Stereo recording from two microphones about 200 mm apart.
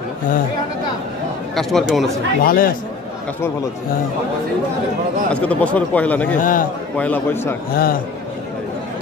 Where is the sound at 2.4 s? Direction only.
45° left (ahead or behind).